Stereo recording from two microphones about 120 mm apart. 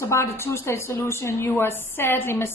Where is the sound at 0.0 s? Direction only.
20° left (ahead or behind).